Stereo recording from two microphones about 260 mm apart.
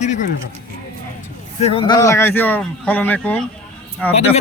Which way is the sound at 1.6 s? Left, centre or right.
Centre.